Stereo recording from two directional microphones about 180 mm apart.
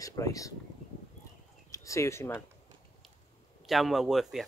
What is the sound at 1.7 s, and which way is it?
Speech, 15° left (ahead or behind).